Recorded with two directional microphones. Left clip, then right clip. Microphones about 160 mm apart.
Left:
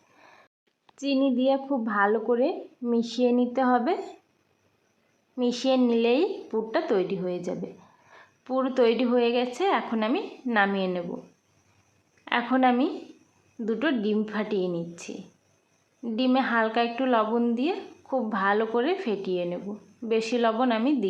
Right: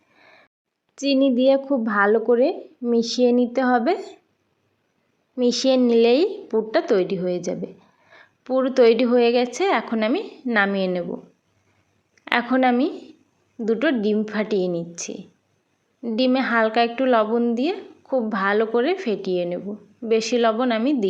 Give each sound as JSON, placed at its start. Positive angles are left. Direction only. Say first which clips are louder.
{"t": 0.9, "sound": "a woman's voice", "louder": "right 6 dB", "side_deg": -30}
{"t": 5.4, "sound": "a woman's voice", "louder": "right 6 dB", "side_deg": -30}
{"t": 12.2, "sound": "a woman's voice", "louder": "right 4 dB", "side_deg": -30}